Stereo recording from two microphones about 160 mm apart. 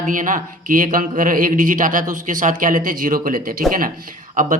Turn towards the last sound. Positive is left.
turn(degrees=-55)  # may be behind; listen again after turning